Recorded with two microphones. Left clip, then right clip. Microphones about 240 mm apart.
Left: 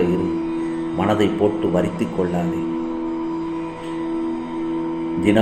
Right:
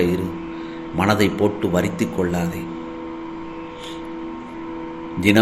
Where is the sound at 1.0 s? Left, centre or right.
Right.